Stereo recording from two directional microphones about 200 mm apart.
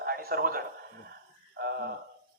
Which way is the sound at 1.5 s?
55° right (ahead or behind).